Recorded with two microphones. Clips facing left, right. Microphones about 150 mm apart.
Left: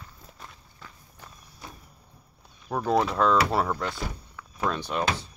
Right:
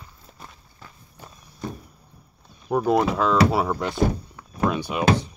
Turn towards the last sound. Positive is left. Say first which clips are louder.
# right 4 dB
turn(degrees=-10)  # may be behind; listen again after turning